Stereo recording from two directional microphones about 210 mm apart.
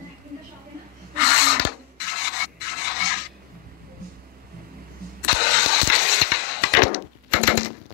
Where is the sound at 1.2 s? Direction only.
50° left (ahead or behind).